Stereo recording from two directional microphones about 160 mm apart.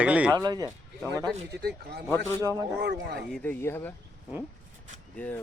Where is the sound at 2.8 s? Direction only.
90° right.